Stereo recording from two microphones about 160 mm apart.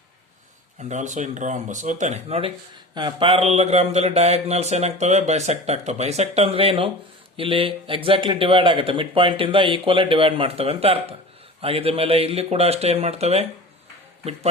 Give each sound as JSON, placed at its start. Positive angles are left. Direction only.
{"t": 0.8, "sound": "speech", "side_deg": -45}
{"t": 2.9, "sound": "speech", "side_deg": -30}